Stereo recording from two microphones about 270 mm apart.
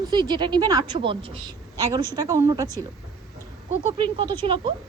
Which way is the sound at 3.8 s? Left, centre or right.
Centre.